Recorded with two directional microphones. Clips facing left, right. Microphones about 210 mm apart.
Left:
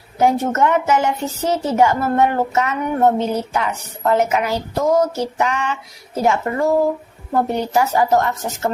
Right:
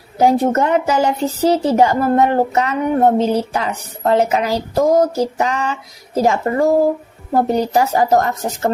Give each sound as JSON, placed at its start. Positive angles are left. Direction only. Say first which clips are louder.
{"t": 0.2, "sound": "speech", "louder": "right 3 dB", "side_deg": -35}